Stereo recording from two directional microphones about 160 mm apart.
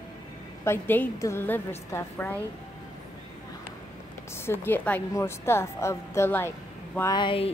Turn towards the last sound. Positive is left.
turn(degrees=30)  # may be behind; listen again after turning